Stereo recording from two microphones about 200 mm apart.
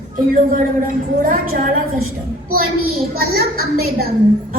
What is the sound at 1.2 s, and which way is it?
Speech, 45° right (ahead or behind).